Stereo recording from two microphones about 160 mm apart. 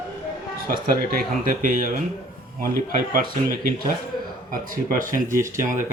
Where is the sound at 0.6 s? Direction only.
70° right (ahead or behind).